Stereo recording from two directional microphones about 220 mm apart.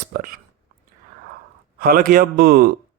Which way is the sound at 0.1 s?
40° right (ahead or behind).